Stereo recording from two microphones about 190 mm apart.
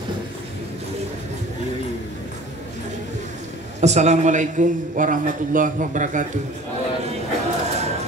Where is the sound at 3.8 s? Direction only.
35° right (ahead or behind).